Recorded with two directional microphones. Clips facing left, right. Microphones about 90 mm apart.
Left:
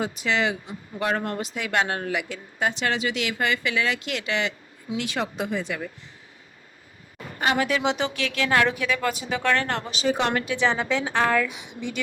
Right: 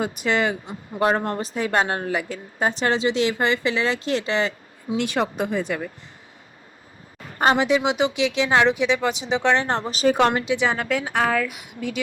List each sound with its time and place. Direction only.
0.0 s speech: 55° right (ahead or behind)
0.7 s speech: 35° right (ahead or behind)
5.2 s speech: 55° right (ahead or behind)
7.5 s speech: 20° right (ahead or behind); by 10.3 s 50° right (ahead or behind)
10.3 s a woman's voice: 20° right (ahead or behind)
10.8 s a woman's voice: 5° right (ahead or behind)